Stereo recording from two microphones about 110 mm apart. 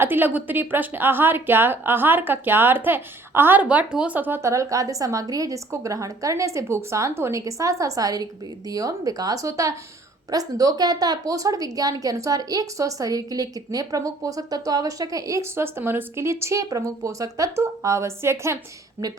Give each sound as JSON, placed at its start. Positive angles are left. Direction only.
{"t": 0.0, "sound": "a woman's voice", "side_deg": -20}